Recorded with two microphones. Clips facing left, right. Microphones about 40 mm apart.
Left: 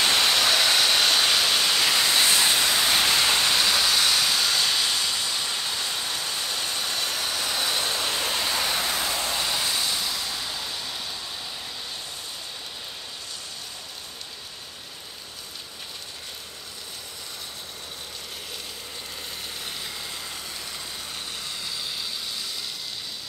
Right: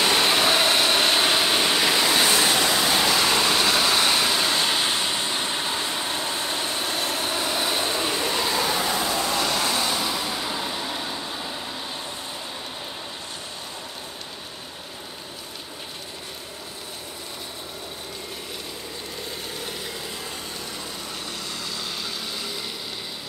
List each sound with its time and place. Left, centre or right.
0.0 s vehicle: right
8.8 s a sound: right
9.3 s vehicle: centre